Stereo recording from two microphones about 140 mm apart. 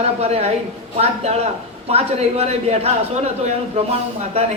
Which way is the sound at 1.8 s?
45° right (ahead or behind).